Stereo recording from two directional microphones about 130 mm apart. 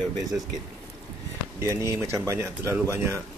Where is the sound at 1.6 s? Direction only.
20° right (ahead or behind).